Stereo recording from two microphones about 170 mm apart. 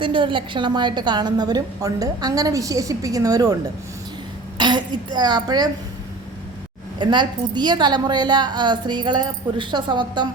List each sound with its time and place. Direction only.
0.0 s a woman's voice: 30° right (ahead or behind)
7.0 s a woman's voice: 25° right (ahead or behind)